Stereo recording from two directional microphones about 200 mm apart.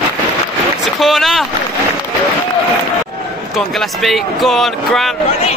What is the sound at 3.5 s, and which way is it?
Speech, centre (ahead or behind).